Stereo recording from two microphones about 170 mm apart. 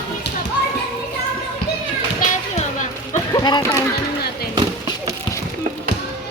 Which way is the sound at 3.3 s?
25° left (ahead or behind).